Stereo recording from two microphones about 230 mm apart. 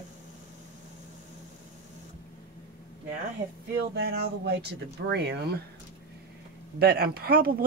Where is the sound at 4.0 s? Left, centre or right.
Right.